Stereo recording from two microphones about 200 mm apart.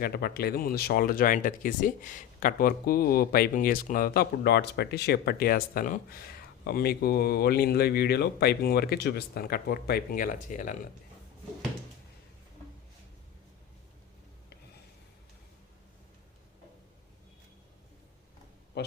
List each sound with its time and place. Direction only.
0.0 s speech: 50° left (ahead or behind)